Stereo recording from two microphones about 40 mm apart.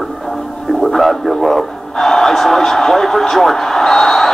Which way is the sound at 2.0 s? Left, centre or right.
Centre.